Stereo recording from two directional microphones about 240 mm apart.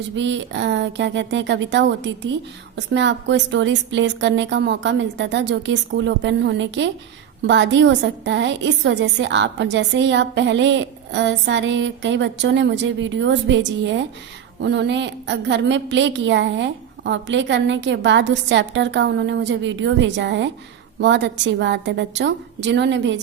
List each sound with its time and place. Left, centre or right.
0.2 s a woman's voice: right